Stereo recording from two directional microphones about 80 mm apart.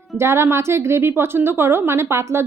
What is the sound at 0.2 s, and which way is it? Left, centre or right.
A woman's voice, right.